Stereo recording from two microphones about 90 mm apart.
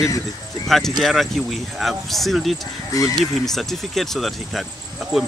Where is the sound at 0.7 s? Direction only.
5° left (ahead or behind).